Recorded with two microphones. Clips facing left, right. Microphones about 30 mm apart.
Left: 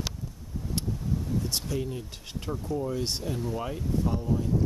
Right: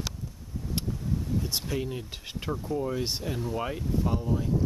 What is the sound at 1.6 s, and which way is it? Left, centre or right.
Speech, right.